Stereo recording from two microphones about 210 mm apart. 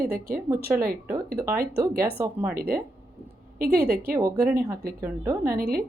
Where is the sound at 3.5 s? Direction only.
50° right (ahead or behind).